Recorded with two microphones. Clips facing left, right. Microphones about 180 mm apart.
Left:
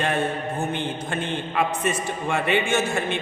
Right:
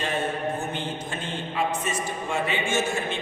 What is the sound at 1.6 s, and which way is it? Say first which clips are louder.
A man's voice: left 3 dB; 60° left (ahead or behind).